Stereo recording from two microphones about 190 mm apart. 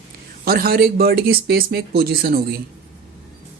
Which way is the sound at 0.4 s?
50° right (ahead or behind).